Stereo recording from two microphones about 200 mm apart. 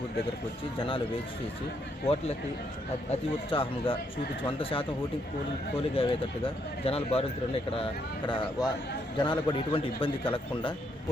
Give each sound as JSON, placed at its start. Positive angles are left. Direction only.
{"t": 0.8, "sound": "speech", "side_deg": 25}
{"t": 3.1, "sound": "speech", "side_deg": 25}
{"t": 5.9, "sound": "speech", "side_deg": 25}